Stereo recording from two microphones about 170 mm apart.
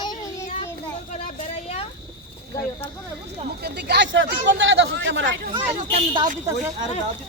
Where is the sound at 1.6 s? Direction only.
35° left (ahead or behind).